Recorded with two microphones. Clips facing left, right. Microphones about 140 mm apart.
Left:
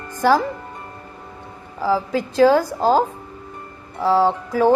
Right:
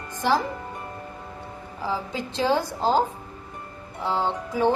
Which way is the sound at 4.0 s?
90° left.